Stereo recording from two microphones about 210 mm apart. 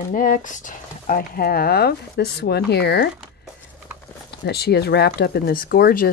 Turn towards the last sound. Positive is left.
turn(degrees=45)  # may be behind; listen again after turning